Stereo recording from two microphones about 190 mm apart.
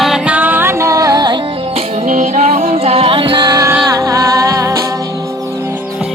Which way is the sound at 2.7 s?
30° right (ahead or behind).